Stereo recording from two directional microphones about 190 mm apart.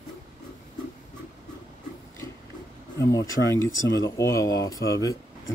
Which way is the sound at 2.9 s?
15° left (ahead or behind).